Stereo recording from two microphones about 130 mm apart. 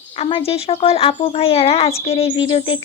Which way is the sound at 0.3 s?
45° left (ahead or behind).